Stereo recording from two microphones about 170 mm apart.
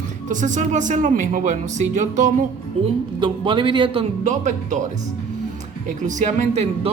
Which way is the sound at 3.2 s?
30° right (ahead or behind).